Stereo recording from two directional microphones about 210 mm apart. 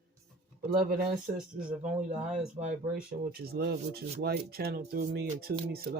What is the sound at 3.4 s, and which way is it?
Speech, 50° right (ahead or behind).